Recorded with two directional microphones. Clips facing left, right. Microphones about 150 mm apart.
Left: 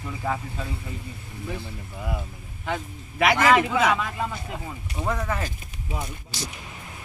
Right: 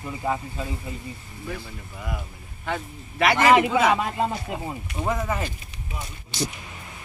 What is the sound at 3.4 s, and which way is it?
Speech, 15° right (ahead or behind).